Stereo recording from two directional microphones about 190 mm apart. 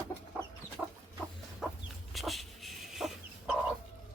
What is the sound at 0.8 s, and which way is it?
Chicken, 5° right (ahead or behind).